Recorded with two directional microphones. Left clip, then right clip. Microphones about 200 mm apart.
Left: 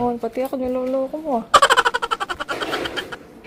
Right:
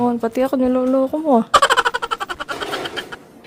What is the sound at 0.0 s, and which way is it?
Speech, 35° right (ahead or behind).